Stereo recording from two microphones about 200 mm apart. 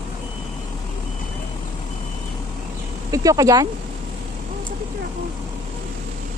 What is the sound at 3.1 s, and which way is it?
Speech, 15° right (ahead or behind).